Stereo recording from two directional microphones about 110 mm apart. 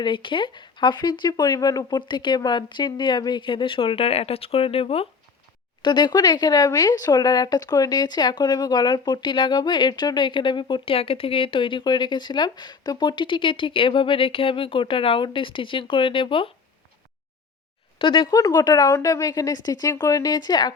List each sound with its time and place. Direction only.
0.0 s speech: 50° left (ahead or behind)
5.8 s speech: 45° left (ahead or behind)
18.0 s speech: 50° left (ahead or behind)
18.3 s a woman's voice: 35° left (ahead or behind)